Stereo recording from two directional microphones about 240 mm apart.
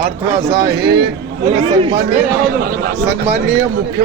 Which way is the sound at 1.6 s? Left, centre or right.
Right.